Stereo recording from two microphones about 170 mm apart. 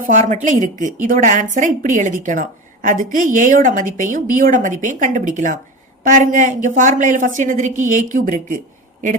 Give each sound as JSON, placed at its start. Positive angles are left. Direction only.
{"t": 0.1, "sound": "a woman's voice", "side_deg": -45}